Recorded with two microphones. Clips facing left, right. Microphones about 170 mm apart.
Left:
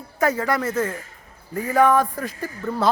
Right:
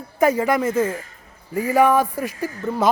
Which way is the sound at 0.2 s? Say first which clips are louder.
Right 4 dB; 15° right (ahead or behind).